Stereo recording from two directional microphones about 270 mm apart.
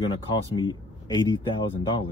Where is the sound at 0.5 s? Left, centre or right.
Centre.